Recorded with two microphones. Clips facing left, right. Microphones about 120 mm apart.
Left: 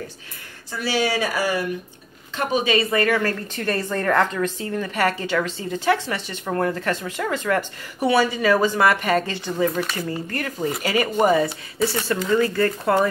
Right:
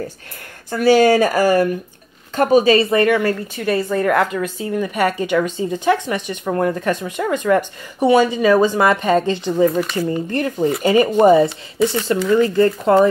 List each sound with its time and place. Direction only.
0.7 s a woman's voice: 50° right (ahead or behind); by 9.7 s 20° right (ahead or behind)
9.7 s speech: centre (ahead or behind)
9.9 s speech: 25° right (ahead or behind)